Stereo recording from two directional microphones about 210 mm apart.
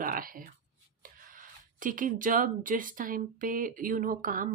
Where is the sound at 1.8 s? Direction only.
40° right (ahead or behind).